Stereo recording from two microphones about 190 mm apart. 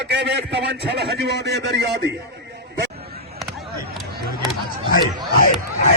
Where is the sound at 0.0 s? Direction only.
65° right (ahead or behind).